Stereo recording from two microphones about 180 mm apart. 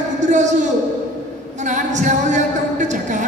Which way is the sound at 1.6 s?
40° right (ahead or behind).